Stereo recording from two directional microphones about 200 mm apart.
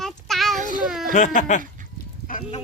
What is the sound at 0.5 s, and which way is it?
Children playing, 40° right (ahead or behind).